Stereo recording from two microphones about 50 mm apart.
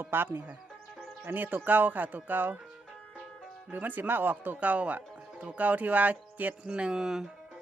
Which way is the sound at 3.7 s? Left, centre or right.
Right.